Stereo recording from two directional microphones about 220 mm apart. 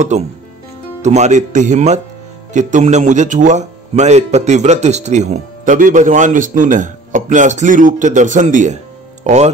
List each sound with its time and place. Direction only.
0.1 s speech: 30° right (ahead or behind)